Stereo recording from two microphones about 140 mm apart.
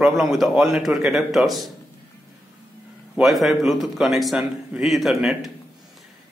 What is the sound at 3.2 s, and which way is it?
Speech, centre (ahead or behind).